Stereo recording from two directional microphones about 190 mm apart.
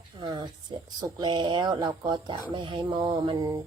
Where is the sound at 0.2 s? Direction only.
25° right (ahead or behind).